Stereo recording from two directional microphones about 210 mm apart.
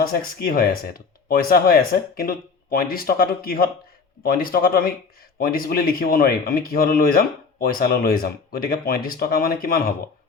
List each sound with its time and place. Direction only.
0.0 s speech: 45° left (ahead or behind)